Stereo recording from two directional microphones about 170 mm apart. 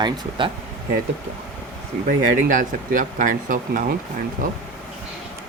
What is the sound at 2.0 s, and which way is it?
Speech, 50° right (ahead or behind).